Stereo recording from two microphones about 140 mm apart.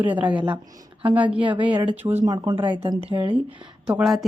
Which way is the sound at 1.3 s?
35° right (ahead or behind).